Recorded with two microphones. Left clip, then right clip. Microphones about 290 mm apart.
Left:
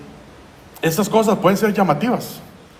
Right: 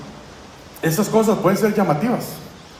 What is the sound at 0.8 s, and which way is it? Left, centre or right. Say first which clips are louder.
A man's voice: left 1 dB; left.